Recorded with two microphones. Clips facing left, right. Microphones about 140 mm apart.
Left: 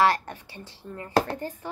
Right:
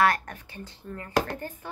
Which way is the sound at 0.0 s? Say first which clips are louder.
Left 1 dB; 25° left (ahead or behind).